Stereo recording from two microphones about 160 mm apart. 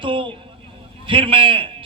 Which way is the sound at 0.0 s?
30° right (ahead or behind).